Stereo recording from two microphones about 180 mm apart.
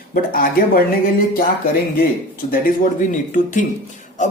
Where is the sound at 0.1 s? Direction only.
55° left (ahead or behind).